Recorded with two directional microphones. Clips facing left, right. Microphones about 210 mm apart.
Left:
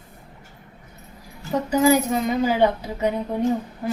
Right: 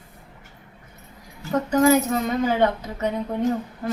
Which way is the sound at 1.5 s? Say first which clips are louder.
Even; 10° left (ahead or behind).